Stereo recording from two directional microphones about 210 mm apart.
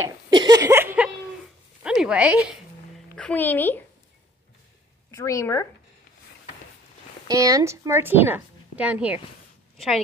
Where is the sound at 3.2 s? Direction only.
5° left (ahead or behind).